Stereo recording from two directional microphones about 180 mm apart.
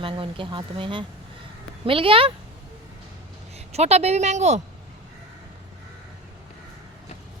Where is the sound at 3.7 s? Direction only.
35° right (ahead or behind).